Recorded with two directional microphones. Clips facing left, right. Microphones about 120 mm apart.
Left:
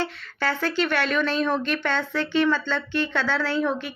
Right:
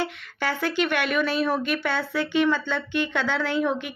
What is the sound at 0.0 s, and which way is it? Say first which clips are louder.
Speech: left 1 dB; 15° right (ahead or behind).